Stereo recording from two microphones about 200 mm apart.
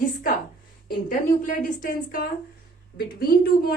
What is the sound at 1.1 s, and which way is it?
A woman's voice, 40° left (ahead or behind).